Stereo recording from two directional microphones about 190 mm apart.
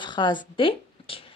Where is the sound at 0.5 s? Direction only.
30° left (ahead or behind).